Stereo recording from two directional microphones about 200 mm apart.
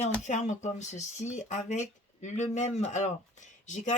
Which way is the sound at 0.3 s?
35° left (ahead or behind).